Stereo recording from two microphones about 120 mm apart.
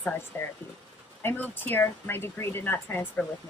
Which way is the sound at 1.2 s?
15° left (ahead or behind).